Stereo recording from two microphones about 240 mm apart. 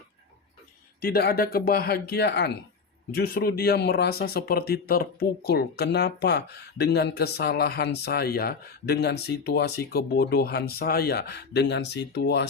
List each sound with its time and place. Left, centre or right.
1.0 s speech: left